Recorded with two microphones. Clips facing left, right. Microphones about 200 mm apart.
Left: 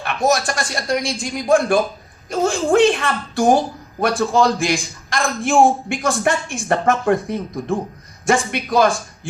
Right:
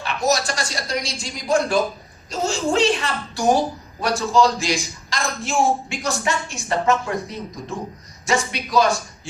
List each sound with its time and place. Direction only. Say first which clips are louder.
0.0 s a man's voice: left 3 dB; 55° left (ahead or behind)